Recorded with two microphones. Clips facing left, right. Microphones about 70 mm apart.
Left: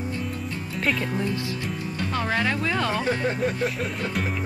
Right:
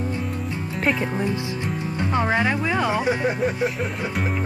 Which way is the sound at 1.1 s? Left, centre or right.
Centre.